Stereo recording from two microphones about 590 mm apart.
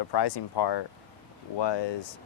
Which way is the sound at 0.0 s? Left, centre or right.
Left.